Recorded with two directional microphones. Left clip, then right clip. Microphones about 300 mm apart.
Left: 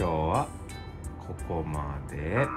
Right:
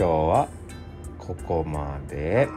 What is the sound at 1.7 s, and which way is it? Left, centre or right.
Speech, centre.